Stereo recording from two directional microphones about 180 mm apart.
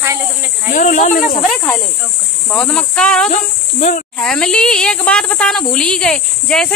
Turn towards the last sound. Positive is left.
turn(degrees=5)  # may be behind; listen again after turning